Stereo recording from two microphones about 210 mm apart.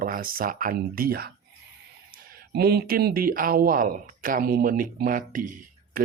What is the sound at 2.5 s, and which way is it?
Speech, 50° right (ahead or behind).